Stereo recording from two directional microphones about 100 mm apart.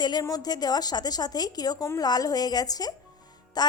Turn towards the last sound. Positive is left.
turn(degrees=40)  # may be behind; listen again after turning